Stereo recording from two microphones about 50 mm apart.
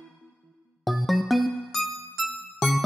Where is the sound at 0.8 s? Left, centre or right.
Centre.